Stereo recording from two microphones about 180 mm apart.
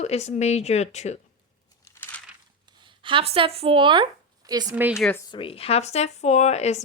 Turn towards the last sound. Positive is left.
turn(degrees=40)  # may be behind; listen again after turning